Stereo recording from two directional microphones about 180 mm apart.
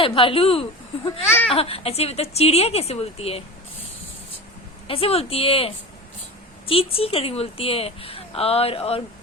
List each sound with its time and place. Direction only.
0.0 s a woman's voice: 30° left (ahead or behind)
1.2 s speech: 15° left (ahead or behind)
1.5 s a woman's voice: 30° left (ahead or behind)
4.9 s a woman's voice: 30° left (ahead or behind)